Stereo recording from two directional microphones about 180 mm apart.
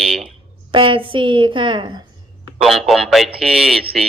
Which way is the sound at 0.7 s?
30° right (ahead or behind).